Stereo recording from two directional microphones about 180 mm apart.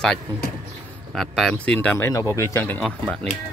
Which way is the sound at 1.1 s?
Centre (ahead or behind).